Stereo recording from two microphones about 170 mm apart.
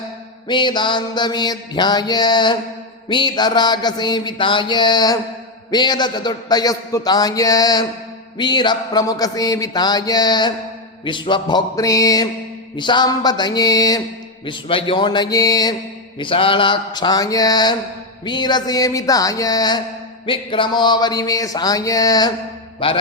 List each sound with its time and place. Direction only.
0.4 s a man's voice: 25° left (ahead or behind)